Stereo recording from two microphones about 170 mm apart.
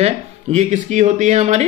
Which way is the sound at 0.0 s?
40° right (ahead or behind).